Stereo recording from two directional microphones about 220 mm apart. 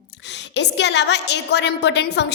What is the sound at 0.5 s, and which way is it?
A woman's voice, 50° left (ahead or behind).